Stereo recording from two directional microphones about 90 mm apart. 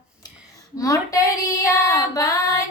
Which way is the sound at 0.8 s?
40° left (ahead or behind).